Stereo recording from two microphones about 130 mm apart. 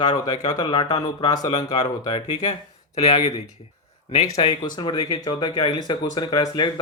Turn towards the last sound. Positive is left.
turn(degrees=30)  # may be behind; listen again after turning